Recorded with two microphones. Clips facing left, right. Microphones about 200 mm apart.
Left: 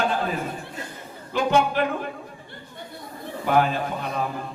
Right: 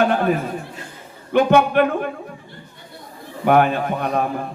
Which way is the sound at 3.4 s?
60° right (ahead or behind).